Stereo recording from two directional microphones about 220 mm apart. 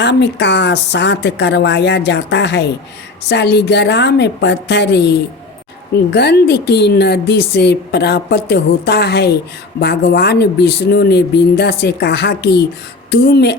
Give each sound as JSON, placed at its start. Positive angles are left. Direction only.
{"t": 0.0, "sound": "a woman's voice", "side_deg": 50}